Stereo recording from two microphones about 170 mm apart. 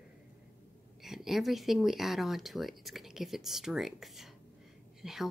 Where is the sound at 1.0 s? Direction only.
Centre (ahead or behind).